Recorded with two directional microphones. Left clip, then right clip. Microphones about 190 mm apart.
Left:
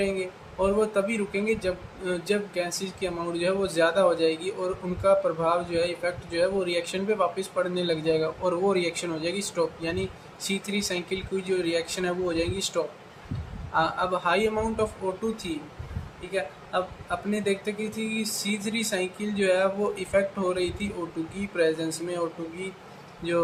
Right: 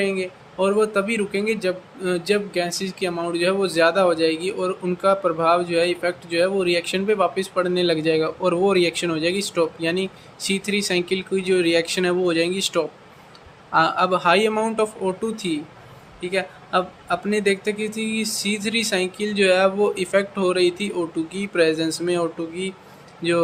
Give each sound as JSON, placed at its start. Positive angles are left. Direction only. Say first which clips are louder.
{"t": 0.0, "sound": "speech", "louder": "right 5 dB", "side_deg": -45}